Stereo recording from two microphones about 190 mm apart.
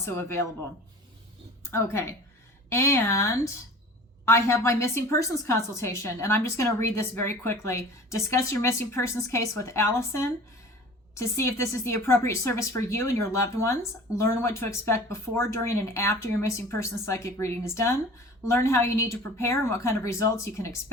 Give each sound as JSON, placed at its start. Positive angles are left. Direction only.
{"t": 0.0, "sound": "speech", "side_deg": 15}
{"t": 1.6, "sound": "a woman's voice", "side_deg": 15}